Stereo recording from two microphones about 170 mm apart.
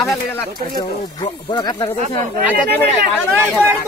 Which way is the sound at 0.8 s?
25° left (ahead or behind).